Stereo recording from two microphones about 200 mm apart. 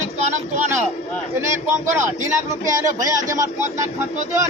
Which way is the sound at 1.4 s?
15° right (ahead or behind).